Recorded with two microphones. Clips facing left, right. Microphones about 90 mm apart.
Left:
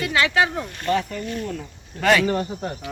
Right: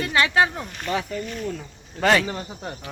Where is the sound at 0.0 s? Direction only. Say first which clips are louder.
Even; 30° right (ahead or behind).